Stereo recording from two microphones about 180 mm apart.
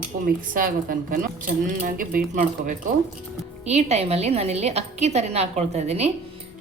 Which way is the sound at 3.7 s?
35° right (ahead or behind).